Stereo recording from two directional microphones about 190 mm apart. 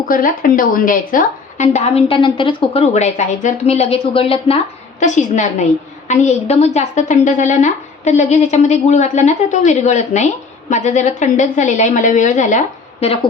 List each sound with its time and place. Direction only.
0.1 s a woman's voice: 45° left (ahead or behind)